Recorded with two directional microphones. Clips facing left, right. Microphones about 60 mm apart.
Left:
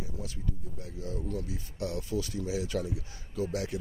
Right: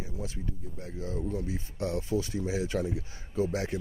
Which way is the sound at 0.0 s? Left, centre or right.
Right.